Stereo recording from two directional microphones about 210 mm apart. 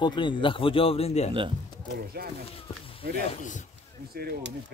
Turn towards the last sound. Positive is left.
turn(degrees=-45)  # may be behind; listen again after turning